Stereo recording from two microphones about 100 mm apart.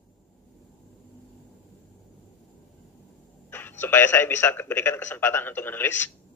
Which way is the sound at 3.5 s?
20° left (ahead or behind).